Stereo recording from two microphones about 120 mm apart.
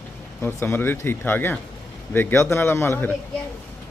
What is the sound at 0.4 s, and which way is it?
A man's voice, 20° left (ahead or behind).